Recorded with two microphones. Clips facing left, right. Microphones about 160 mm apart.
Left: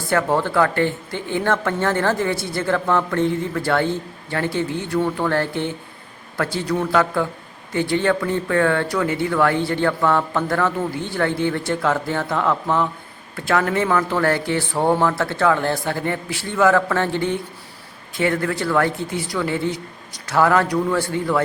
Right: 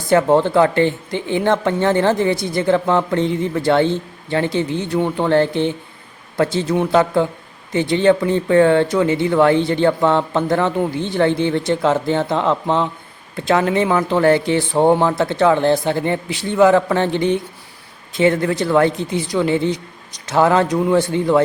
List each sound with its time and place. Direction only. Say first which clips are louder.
0.1 s speech: right 6 dB; 20° right (ahead or behind)